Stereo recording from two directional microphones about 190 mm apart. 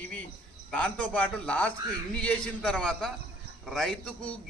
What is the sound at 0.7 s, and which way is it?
A man's voice, 5° left (ahead or behind).